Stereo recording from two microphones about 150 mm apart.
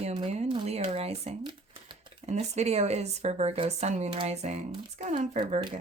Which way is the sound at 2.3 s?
45° right (ahead or behind).